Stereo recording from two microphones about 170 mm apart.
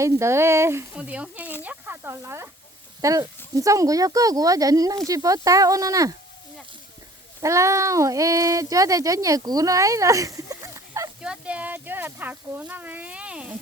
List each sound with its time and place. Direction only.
0.0 s speech: 15° right (ahead or behind)
7.4 s speech: 20° right (ahead or behind)
11.2 s speech: 5° right (ahead or behind)